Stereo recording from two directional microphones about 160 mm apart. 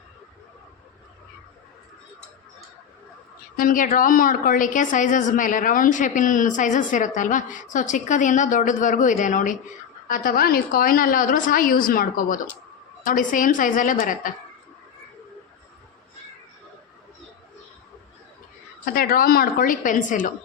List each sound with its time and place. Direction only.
3.6 s a woman's voice: 55° left (ahead or behind)
10.1 s a woman's voice: 65° left (ahead or behind)
18.9 s a woman's voice: 65° left (ahead or behind)